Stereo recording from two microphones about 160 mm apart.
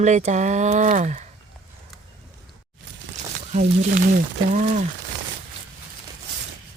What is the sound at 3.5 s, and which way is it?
Speech, 60° right (ahead or behind).